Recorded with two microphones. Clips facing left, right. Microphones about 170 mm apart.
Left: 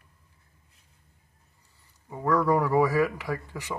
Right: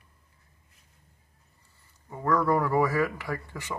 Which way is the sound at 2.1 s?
10° left (ahead or behind).